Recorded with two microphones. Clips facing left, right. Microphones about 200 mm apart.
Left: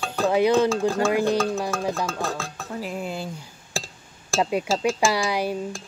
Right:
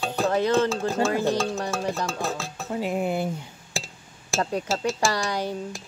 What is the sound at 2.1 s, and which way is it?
Speech, 5° right (ahead or behind).